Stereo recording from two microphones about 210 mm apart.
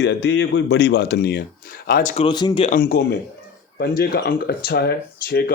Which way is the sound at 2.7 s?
45° left (ahead or behind).